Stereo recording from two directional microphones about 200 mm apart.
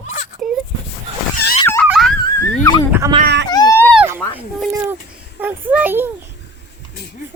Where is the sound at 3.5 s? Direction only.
20° left (ahead or behind).